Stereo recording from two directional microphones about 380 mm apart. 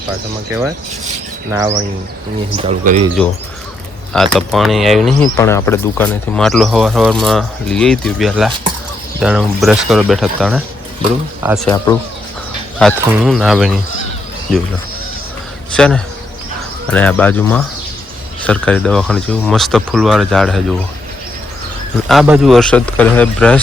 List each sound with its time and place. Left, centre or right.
1.5 s a man's voice: centre
4.1 s speech: centre
15.7 s speech: centre
22.1 s speech: centre